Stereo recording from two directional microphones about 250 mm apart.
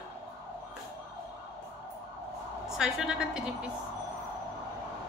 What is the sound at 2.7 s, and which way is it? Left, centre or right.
Speech, centre.